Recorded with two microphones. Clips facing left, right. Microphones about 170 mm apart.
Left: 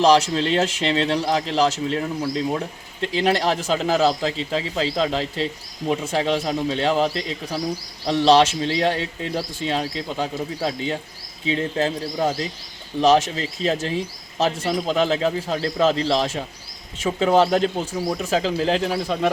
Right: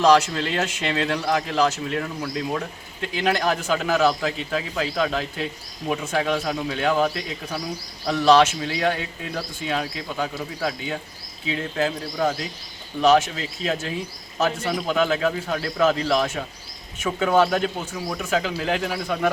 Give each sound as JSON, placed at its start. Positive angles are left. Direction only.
{"t": 0.0, "sound": "speech", "side_deg": 30}